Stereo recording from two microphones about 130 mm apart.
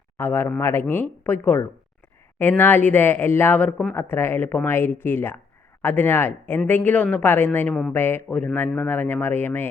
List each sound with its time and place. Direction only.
0.2 s speech: 15° left (ahead or behind)